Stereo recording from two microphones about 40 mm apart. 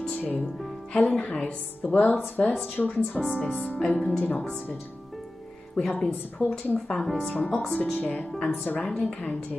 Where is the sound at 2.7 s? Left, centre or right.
Left.